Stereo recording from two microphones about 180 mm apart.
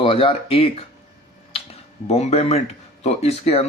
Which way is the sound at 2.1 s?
35° left (ahead or behind).